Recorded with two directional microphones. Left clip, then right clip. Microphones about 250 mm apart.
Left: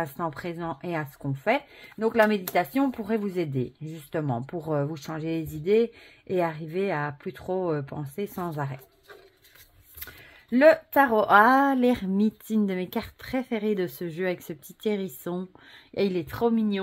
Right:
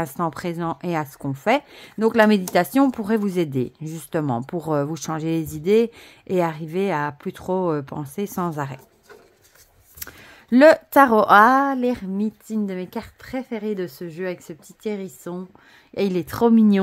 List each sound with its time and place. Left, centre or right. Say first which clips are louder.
0.0 s a woman's voice: right 5 dB; right
10.5 s a woman's voice: right 5 dB; right
11.3 s a woman's voice: right 3 dB; centre
15.9 s speech: right 3 dB; centre
16.3 s speech: right 8 dB; right